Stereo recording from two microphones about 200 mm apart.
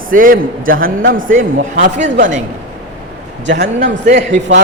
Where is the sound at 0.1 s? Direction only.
45° right (ahead or behind).